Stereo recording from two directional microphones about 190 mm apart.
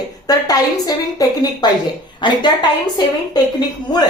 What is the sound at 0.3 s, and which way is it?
Speech, 20° left (ahead or behind).